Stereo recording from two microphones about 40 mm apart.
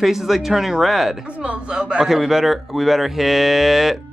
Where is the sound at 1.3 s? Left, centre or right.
Right.